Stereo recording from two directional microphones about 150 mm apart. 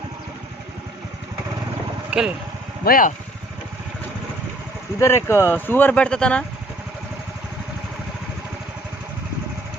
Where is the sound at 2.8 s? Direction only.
75° left (ahead or behind).